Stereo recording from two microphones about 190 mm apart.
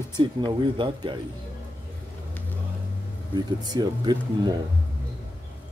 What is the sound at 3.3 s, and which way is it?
Speech, 20° right (ahead or behind).